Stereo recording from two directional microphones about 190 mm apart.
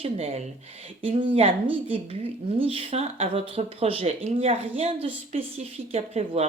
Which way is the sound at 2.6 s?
30° right (ahead or behind).